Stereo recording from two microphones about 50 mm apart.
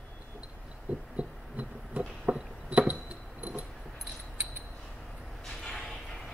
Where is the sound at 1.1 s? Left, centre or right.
Right.